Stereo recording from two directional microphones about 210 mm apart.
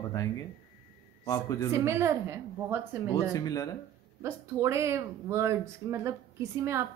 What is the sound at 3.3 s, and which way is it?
Speech, 20° left (ahead or behind).